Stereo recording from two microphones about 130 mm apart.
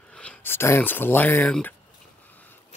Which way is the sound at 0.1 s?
10° left (ahead or behind).